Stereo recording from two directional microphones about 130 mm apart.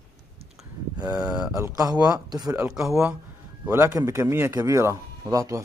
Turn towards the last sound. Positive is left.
turn(degrees=-25)  # may be behind; listen again after turning